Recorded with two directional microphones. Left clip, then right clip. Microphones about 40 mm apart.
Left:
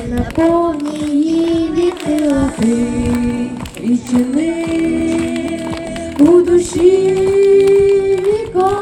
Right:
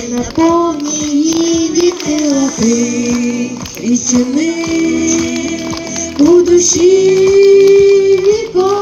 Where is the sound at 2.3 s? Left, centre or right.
Left.